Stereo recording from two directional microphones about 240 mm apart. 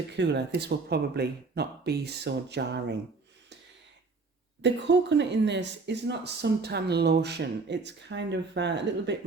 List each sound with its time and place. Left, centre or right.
0.2 s speech: right
4.6 s speech: right